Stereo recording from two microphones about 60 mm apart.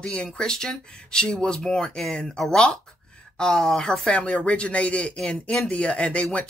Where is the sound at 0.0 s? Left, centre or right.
Centre.